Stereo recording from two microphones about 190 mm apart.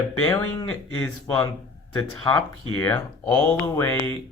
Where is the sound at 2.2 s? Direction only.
15° left (ahead or behind).